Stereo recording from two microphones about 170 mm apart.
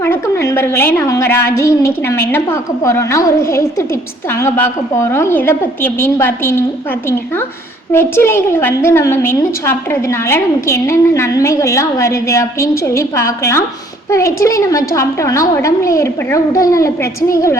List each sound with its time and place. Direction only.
0.0 s a woman's voice: 15° left (ahead or behind)
7.9 s a woman's voice: 15° left (ahead or behind)